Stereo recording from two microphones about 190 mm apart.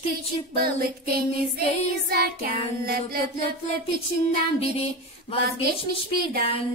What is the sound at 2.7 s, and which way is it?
Music, 55° right (ahead or behind).